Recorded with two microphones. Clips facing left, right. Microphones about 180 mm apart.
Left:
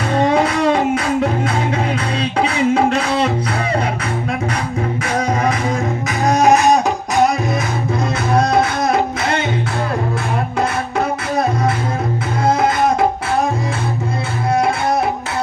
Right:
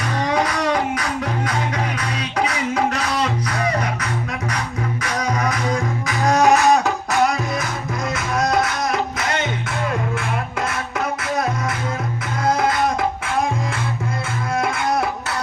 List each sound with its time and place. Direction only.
0.1 s music: 25° left (ahead or behind)
5.0 s music: 25° left (ahead or behind)
8.3 s music: 30° left (ahead or behind)
10.6 s music: 30° left (ahead or behind)